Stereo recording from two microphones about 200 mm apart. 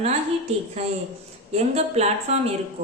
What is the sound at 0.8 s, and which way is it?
Speech, 30° right (ahead or behind).